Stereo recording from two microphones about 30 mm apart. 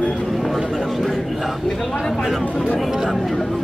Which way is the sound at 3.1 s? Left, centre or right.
Centre.